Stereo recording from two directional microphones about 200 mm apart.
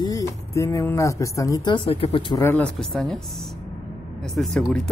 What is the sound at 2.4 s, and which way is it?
Speech, 5° left (ahead or behind).